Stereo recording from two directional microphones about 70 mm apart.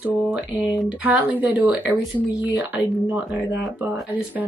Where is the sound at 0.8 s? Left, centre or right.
Right.